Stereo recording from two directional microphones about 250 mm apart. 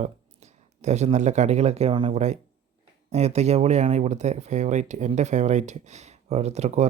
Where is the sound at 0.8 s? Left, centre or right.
Right.